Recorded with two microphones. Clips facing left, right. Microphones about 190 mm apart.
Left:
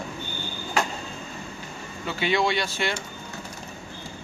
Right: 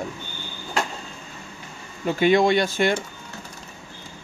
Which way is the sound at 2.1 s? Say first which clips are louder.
Right 7 dB; 50° right (ahead or behind).